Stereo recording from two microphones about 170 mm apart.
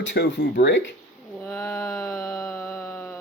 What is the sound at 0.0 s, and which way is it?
Speech, 90° left.